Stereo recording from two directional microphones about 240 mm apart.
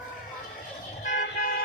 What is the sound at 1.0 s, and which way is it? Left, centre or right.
Toot, left.